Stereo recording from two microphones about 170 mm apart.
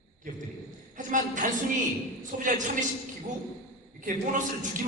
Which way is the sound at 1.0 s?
50° right (ahead or behind).